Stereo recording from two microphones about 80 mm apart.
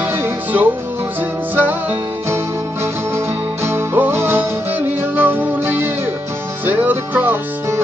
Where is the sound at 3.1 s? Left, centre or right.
Right.